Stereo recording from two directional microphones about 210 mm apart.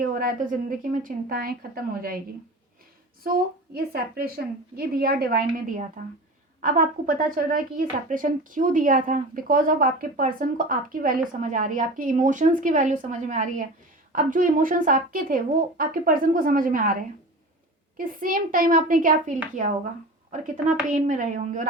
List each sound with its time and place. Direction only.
0.0 s a woman's voice: 40° right (ahead or behind)
3.2 s a woman's voice: 45° right (ahead or behind)
20.3 s a woman's voice: 40° right (ahead or behind)